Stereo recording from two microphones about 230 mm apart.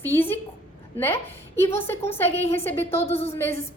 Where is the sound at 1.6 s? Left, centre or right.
Centre.